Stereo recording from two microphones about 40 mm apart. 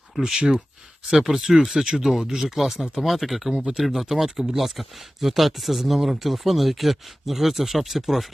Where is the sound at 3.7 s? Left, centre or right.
Centre.